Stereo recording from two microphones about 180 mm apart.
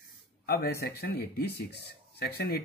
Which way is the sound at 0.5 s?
60° left (ahead or behind).